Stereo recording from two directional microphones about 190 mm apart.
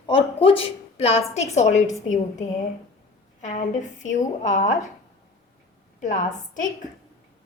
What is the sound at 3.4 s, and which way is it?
A woman's voice, 40° left (ahead or behind).